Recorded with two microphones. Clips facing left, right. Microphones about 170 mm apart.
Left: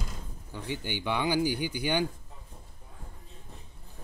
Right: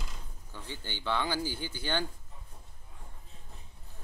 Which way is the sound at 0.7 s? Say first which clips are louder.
Left 3 dB; 15° left (ahead or behind).